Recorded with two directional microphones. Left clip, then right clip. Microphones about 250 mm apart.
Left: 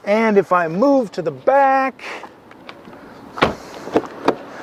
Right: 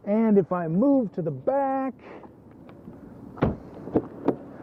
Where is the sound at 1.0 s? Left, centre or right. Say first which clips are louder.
Left 9 dB; centre.